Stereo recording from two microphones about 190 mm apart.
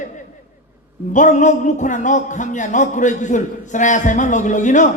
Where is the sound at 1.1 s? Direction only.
40° left (ahead or behind).